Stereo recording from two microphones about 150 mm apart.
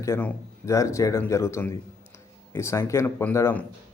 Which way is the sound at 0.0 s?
15° left (ahead or behind).